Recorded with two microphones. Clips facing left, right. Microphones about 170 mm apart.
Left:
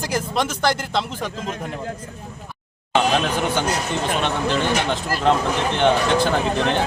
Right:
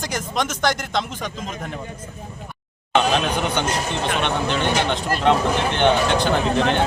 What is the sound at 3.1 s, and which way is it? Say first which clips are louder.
A man's voice: left 1 dB; centre (ahead or behind).